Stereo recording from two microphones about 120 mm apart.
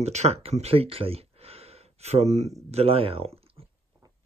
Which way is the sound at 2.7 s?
55° right (ahead or behind).